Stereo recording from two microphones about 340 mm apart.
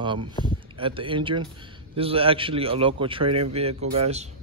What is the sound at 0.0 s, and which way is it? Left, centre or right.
Speech, centre.